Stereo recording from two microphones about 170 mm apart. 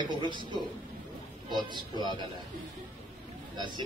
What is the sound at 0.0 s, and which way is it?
Speech, 25° right (ahead or behind).